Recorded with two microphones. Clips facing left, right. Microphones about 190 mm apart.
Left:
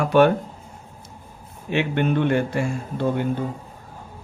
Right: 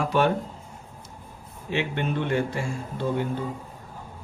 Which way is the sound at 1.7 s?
60° left (ahead or behind).